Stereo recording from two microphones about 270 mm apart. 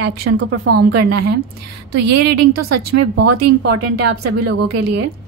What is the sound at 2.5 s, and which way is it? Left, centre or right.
Speech, right.